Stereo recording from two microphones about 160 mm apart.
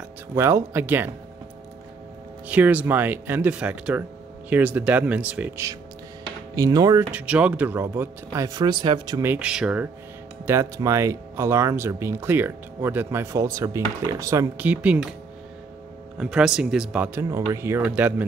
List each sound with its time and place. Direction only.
0.4 s speech: 15° right (ahead or behind)
2.4 s speech: 10° right (ahead or behind)
6.5 s speech: 20° right (ahead or behind)
7.1 s speech: 10° right (ahead or behind); by 9.2 s 25° right (ahead or behind)
9.2 s speech: 10° right (ahead or behind)
10.4 s speech: 20° right (ahead or behind)
16.2 s speech: 5° right (ahead or behind)